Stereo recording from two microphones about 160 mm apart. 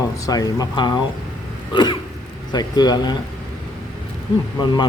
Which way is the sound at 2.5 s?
25° left (ahead or behind).